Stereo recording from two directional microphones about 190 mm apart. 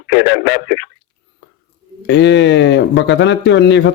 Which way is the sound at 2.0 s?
70° left (ahead or behind).